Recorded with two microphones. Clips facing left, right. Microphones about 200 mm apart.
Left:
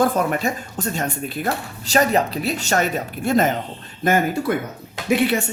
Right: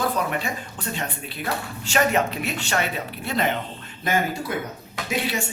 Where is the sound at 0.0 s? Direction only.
50° left (ahead or behind).